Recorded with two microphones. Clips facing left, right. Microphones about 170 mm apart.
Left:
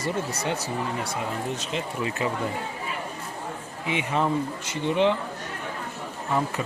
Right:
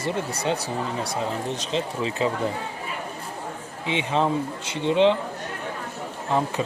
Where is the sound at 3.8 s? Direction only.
20° right (ahead or behind).